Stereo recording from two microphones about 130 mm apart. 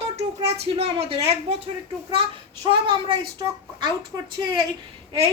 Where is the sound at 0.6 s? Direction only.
50° right (ahead or behind).